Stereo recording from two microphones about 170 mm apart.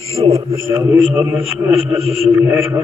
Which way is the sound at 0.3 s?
15° right (ahead or behind).